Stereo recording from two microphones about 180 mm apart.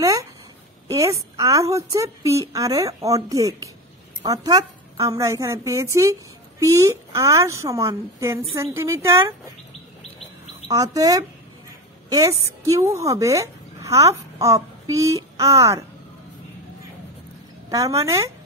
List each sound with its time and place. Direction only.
0.8 s a woman's voice: 20° right (ahead or behind)
10.7 s a woman's voice: 20° right (ahead or behind)
17.6 s a woman's voice: 20° right (ahead or behind)